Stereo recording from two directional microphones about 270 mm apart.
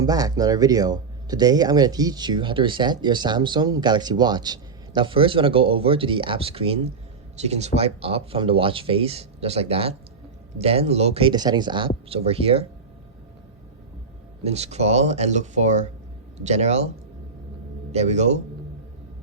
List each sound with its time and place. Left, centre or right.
0.0 s speech: centre
14.4 s speech: right
17.9 s speech: right